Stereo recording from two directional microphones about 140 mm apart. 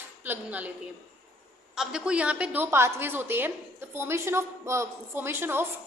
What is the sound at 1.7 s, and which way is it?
A woman's voice, 5° right (ahead or behind).